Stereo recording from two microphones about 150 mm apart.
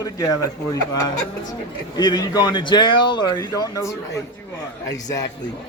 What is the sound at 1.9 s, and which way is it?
Speech, 25° left (ahead or behind).